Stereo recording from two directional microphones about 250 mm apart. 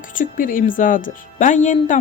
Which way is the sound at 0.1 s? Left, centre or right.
Left.